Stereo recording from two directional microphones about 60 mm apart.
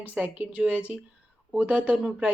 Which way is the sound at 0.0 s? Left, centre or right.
Right.